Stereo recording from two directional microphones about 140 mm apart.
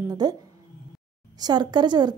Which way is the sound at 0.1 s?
30° right (ahead or behind).